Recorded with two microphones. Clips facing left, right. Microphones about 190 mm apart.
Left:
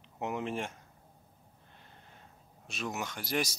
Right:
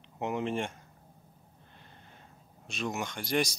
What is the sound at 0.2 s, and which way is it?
Speech, centre (ahead or behind).